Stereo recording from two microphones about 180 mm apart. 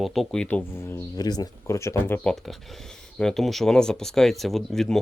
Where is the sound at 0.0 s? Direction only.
Centre (ahead or behind).